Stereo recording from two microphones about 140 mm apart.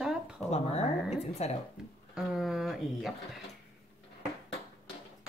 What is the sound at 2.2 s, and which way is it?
A woman's voice, 5° right (ahead or behind).